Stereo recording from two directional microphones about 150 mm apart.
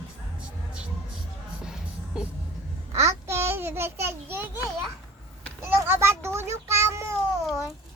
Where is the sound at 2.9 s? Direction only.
20° right (ahead or behind).